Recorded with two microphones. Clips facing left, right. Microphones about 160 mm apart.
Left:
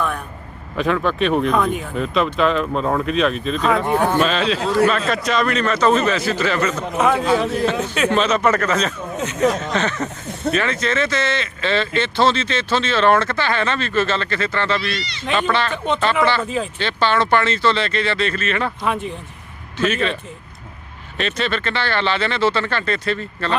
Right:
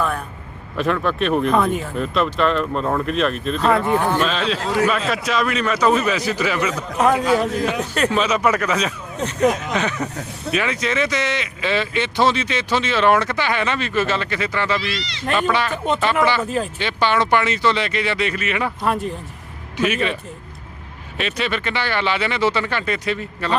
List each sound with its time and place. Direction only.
0.8 s speech: centre (ahead or behind)
14.8 s speech: 90° right
15.2 s speech: 5° right (ahead or behind)
21.2 s speech: 10° right (ahead or behind)